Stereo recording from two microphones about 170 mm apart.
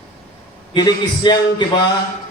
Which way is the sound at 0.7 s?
25° left (ahead or behind).